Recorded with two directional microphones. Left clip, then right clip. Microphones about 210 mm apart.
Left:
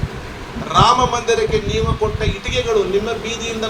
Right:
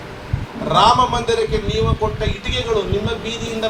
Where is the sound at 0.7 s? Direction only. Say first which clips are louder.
Even; 30° left (ahead or behind).